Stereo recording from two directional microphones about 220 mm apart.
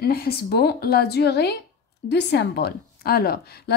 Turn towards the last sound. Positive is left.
turn(degrees=45)  # may be behind; listen again after turning